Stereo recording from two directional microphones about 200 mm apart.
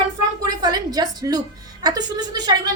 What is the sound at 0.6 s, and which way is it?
Speech, 20° right (ahead or behind).